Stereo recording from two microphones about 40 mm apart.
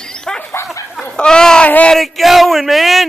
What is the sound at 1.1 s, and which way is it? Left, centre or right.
Speech, centre.